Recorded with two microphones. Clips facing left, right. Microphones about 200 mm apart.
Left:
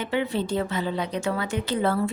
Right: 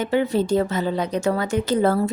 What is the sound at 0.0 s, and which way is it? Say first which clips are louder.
A woman's voice: right 6 dB; 40° right (ahead or behind).